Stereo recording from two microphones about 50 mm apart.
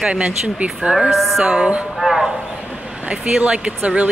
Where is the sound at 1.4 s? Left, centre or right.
Centre.